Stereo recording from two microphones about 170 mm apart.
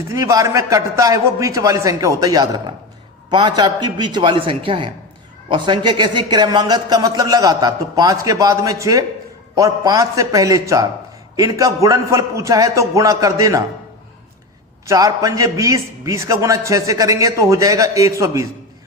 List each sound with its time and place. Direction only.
0.1 s speech: 20° right (ahead or behind)
14.8 s speech: 20° right (ahead or behind)